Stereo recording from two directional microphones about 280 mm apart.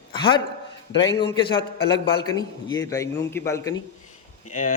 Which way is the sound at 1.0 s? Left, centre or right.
Left.